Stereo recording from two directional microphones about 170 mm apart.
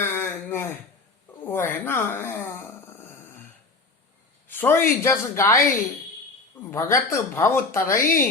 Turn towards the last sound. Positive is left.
turn(degrees=15)  # may be behind; listen again after turning